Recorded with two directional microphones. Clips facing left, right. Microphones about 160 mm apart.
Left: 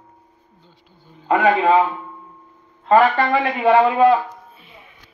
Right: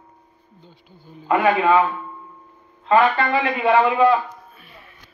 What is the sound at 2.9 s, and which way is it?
A man's voice, 40° left (ahead or behind).